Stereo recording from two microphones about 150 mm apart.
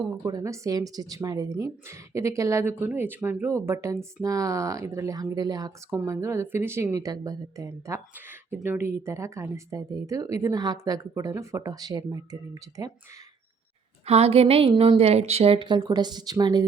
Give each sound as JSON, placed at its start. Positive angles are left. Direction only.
{"t": 0.1, "sound": "speech", "side_deg": -20}
{"t": 14.0, "sound": "a woman's voice", "side_deg": -45}